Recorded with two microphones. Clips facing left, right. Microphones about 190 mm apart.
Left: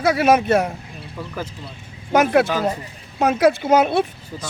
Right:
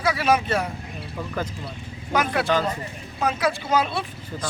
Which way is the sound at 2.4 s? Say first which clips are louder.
Left 1 dB; 5° left (ahead or behind).